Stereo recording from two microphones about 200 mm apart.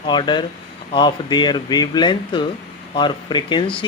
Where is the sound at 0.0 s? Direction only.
25° left (ahead or behind).